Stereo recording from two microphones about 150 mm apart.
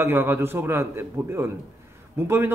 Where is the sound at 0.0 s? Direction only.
15° right (ahead or behind).